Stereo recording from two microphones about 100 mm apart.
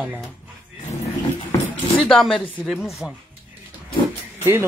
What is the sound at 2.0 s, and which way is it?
Speech, 5° left (ahead or behind).